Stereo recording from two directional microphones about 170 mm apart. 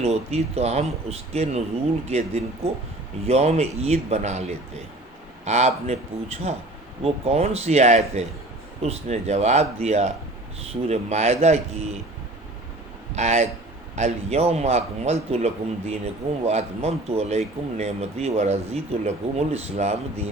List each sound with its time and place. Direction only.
0.0 s speech: 35° right (ahead or behind)
13.1 s speech: 40° right (ahead or behind)